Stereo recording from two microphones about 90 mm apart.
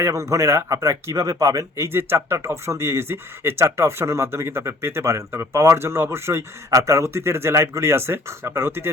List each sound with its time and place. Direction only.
0.0 s speech: 35° right (ahead or behind)